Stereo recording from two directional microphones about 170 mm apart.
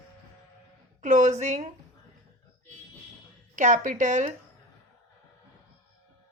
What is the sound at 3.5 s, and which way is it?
Speech, 45° right (ahead or behind).